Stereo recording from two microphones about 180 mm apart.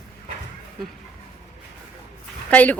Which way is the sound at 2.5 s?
10° left (ahead or behind).